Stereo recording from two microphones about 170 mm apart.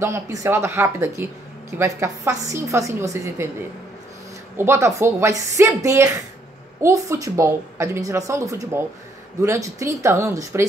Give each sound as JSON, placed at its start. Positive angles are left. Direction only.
{"t": 0.0, "sound": "a woman's voice", "side_deg": -15}
{"t": 4.6, "sound": "a woman's voice", "side_deg": -15}